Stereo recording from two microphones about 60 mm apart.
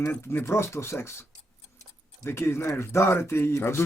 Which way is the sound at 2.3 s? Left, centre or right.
Left.